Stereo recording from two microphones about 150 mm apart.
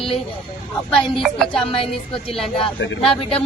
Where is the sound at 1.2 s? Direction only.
5° left (ahead or behind).